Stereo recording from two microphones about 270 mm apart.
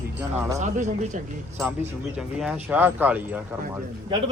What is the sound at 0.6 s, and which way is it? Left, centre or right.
Speech, right.